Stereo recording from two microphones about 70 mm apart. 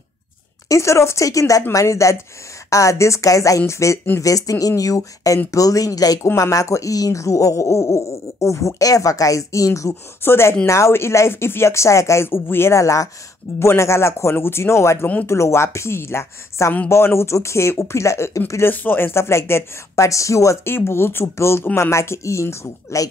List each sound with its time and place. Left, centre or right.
0.7 s a woman's voice: left
18.7 s a woman's voice: left
20.7 s a woman's voice: left